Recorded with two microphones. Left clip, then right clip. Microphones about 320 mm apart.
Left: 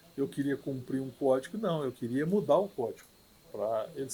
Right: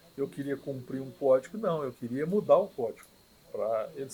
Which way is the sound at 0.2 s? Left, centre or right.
Left.